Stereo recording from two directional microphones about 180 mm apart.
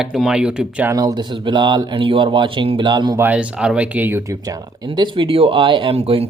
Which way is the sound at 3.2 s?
10° right (ahead or behind).